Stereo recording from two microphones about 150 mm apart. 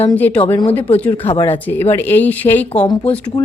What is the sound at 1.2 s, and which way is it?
Speech, 40° left (ahead or behind).